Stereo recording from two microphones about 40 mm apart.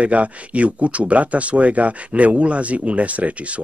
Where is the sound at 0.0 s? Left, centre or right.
Right.